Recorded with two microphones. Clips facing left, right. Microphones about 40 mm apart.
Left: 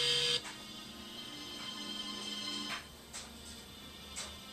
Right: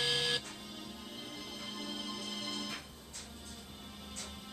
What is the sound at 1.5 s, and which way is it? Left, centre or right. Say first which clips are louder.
Music: right 1 dB; centre.